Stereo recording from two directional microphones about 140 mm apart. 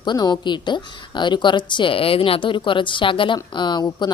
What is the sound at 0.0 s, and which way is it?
A woman's voice, 30° left (ahead or behind).